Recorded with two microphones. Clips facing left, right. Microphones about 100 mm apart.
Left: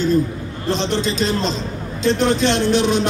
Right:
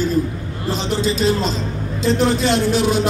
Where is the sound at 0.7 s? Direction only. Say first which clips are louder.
Even; 5° right (ahead or behind).